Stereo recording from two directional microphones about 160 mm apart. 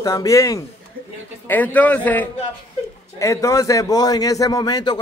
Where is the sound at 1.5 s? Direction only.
10° left (ahead or behind).